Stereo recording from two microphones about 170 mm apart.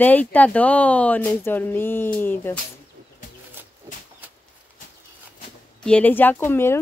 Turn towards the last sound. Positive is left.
turn(degrees=15)  # may be behind; listen again after turning